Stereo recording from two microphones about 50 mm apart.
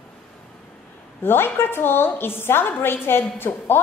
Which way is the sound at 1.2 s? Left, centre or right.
Left.